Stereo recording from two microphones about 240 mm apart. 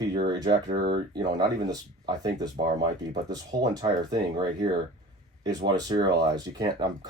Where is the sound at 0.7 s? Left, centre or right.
Right.